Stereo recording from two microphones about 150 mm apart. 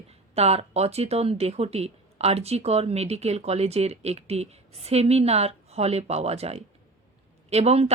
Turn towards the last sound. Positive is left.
turn(degrees=-45)  # may be behind; listen again after turning